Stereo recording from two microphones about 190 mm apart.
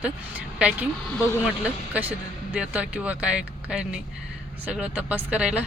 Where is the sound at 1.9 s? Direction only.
10° right (ahead or behind).